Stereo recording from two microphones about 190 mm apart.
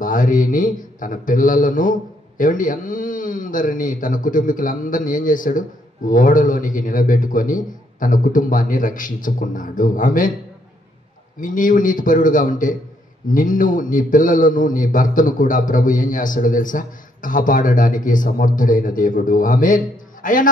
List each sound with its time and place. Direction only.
0.0 s speech: 45° left (ahead or behind)
11.4 s speech: 45° left (ahead or behind)